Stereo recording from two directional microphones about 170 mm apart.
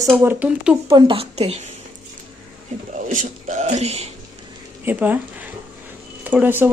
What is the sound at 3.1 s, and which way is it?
Speech, 50° right (ahead or behind).